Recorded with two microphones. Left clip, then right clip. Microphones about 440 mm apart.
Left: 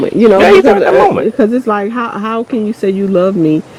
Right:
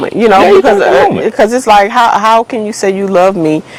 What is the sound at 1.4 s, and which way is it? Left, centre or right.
Speech, right.